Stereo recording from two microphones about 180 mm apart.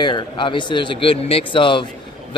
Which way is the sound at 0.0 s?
25° left (ahead or behind).